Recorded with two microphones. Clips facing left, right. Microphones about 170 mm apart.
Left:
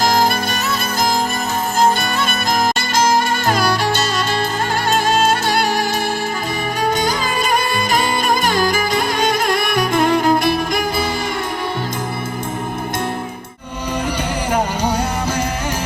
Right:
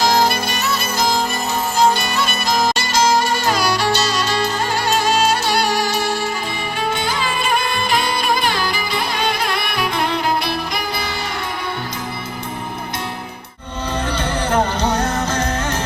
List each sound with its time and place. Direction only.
0.0 s music: 50° left (ahead or behind)
14.2 s music: 10° left (ahead or behind)